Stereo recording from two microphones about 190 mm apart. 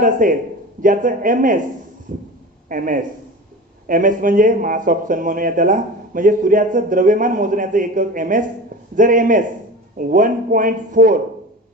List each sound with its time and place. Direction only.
0.0 s speech: 45° right (ahead or behind)